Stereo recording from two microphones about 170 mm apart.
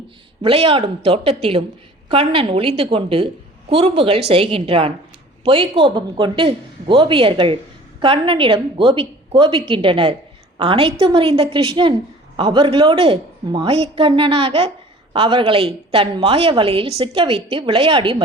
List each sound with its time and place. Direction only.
0.4 s a woman's voice: 35° right (ahead or behind)